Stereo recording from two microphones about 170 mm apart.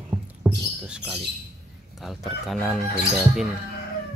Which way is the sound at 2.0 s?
Centre (ahead or behind).